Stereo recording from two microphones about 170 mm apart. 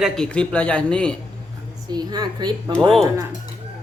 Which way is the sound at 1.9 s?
25° right (ahead or behind).